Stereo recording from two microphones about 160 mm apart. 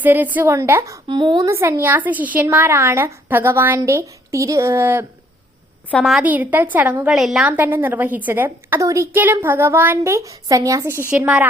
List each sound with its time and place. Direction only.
0.0 s a woman's voice: 10° right (ahead or behind)
1.0 s a woman's voice: 30° right (ahead or behind)
5.9 s a woman's voice: 5° left (ahead or behind)
6.2 s a woman's voice: 10° right (ahead or behind)